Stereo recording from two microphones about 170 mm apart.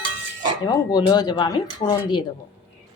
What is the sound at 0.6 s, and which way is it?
A woman's voice, 25° left (ahead or behind).